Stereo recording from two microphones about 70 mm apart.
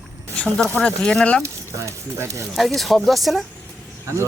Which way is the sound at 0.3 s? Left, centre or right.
Centre.